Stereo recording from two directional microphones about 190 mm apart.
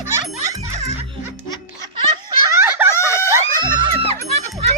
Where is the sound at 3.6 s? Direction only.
25° right (ahead or behind).